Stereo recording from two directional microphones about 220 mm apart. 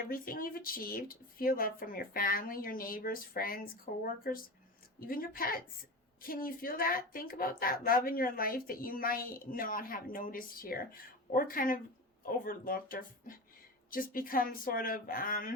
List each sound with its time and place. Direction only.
0.0 s a woman's voice: 40° left (ahead or behind)